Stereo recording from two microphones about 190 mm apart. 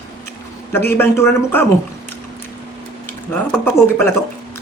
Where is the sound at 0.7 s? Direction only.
10° left (ahead or behind).